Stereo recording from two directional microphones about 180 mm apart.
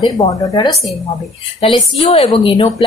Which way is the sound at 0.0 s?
20° left (ahead or behind).